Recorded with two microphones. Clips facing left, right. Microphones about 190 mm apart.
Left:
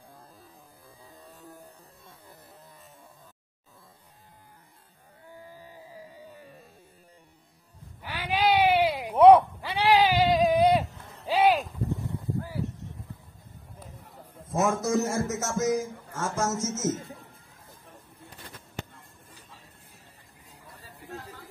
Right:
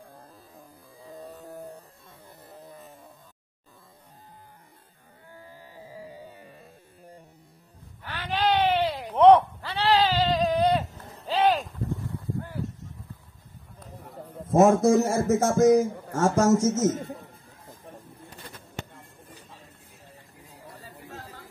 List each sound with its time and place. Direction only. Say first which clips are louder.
8.0 s cat: left 1 dB; 10° left (ahead or behind)
11.2 s a sound: left 1 dB; 10° left (ahead or behind)
14.1 s a man's voice: right 9 dB; 55° right (ahead or behind)
16.2 s a man's voice: right 9 dB; 30° right (ahead or behind)
16.8 s a man's voice: right 5 dB; 60° right (ahead or behind)